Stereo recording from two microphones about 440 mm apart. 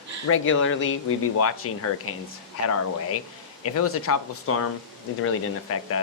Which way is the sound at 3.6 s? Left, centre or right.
Left.